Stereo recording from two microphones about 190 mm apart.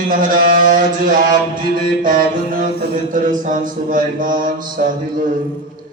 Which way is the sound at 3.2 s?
45° right (ahead or behind).